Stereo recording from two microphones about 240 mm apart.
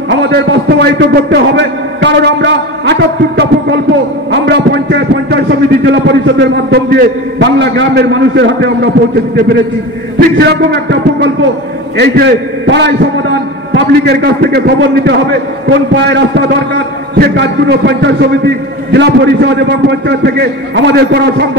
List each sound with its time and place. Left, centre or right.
0.1 s a man's voice: right
10.1 s a man's voice: right